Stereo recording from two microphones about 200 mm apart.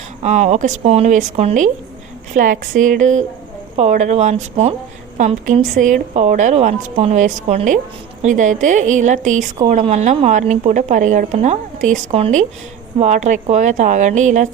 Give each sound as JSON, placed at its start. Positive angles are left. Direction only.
{"t": 0.2, "sound": "a woman's voice", "side_deg": -35}